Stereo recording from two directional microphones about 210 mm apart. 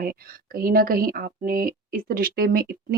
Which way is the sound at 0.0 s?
45° right (ahead or behind).